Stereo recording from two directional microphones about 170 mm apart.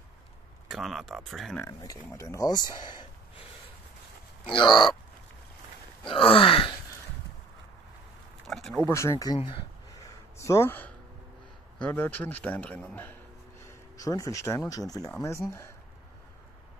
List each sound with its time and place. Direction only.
0.7 s speech: centre (ahead or behind)
1.6 s speech: 20° left (ahead or behind)
4.5 s speech: 25° left (ahead or behind)
6.0 s wail: 30° left (ahead or behind)
8.5 s a sound: centre (ahead or behind)
8.8 s a man's voice: 15° left (ahead or behind)
9.9 s a sound: 20° left (ahead or behind)
11.8 s a man's voice: 10° left (ahead or behind)
13.7 s speech: 20° left (ahead or behind)